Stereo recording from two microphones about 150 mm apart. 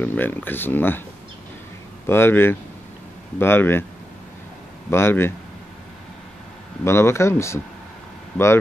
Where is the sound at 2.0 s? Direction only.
15° left (ahead or behind).